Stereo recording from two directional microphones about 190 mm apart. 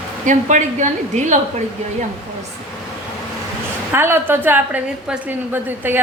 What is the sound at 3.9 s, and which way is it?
A woman's voice, 10° right (ahead or behind).